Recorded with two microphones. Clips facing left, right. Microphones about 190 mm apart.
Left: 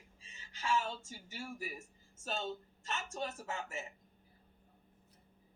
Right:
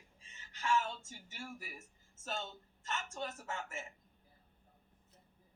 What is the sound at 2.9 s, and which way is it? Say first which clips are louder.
A man's voice: left 1 dB; 20° left (ahead or behind).